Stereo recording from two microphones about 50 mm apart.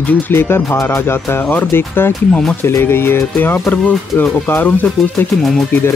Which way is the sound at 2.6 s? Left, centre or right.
Left.